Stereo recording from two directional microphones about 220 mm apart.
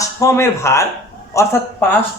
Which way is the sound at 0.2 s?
10° left (ahead or behind).